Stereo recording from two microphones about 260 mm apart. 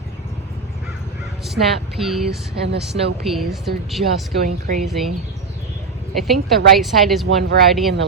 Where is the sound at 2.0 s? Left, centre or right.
Centre.